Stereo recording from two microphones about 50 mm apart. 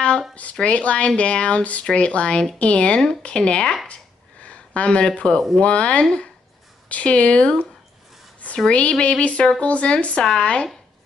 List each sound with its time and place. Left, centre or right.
0.3 s speech: left
3.8 s a sound: left
5.6 s speech: left